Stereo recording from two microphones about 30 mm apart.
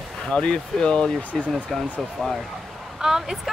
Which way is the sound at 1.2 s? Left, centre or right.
Left.